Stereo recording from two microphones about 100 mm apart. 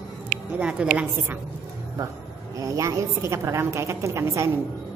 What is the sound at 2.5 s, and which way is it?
A woman's voice, 35° right (ahead or behind).